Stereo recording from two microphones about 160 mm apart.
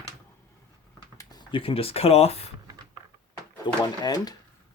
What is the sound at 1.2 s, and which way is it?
Speech, 25° left (ahead or behind).